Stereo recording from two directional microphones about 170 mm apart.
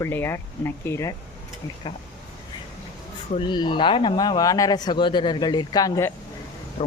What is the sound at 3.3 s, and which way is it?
A man's voice, 30° left (ahead or behind).